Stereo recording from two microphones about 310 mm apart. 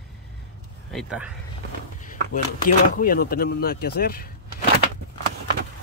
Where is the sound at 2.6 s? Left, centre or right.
Left.